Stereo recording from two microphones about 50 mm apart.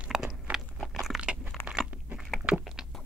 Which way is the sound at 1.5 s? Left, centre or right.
Centre.